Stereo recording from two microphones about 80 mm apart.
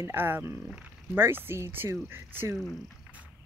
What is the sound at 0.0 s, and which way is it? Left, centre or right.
Speech, right.